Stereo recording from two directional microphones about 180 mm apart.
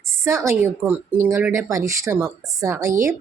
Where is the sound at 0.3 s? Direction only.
15° right (ahead or behind).